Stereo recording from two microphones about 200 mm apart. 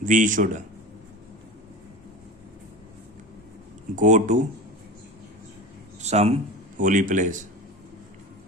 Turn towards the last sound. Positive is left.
turn(degrees=-40)  # may be behind; listen again after turning